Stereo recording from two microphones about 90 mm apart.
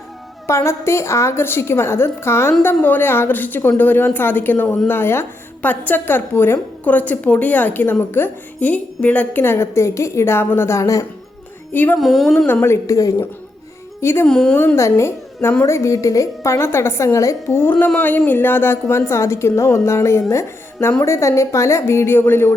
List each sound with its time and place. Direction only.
0.4 s a woman's voice: 30° left (ahead or behind)
11.7 s a woman's voice: 20° left (ahead or behind)
11.9 s a woman's voice: centre (ahead or behind)
12.5 s a woman's voice: 25° left (ahead or behind)
14.0 s a woman's voice: 25° left (ahead or behind)
14.3 s a woman's voice: 5° left (ahead or behind)
14.8 s a woman's voice: 35° left (ahead or behind)